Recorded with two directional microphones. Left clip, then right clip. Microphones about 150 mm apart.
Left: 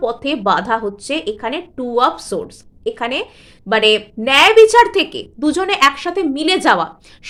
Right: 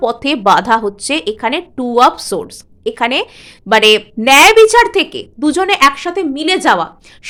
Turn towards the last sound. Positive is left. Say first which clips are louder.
# right 2 dB
turn(degrees=-15)  # may be behind; listen again after turning